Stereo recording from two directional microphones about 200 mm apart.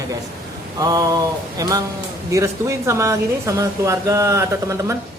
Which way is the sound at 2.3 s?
15° right (ahead or behind).